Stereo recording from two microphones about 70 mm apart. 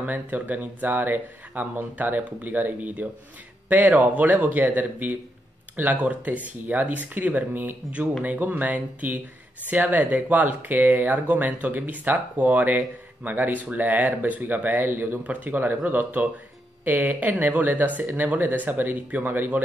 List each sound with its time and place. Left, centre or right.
0.0 s speech: right